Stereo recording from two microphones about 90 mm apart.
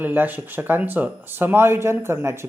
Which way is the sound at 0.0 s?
20° right (ahead or behind).